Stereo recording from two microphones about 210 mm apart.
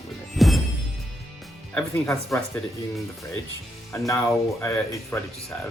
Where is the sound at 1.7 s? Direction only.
10° left (ahead or behind).